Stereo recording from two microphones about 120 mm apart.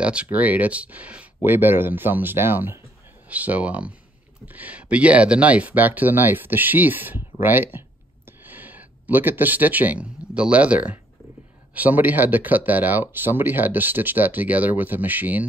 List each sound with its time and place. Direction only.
0.0 s speech: 10° right (ahead or behind)